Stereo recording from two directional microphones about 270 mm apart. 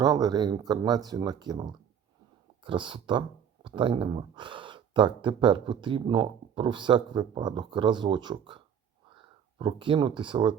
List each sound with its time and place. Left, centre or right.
0.0 s speech: centre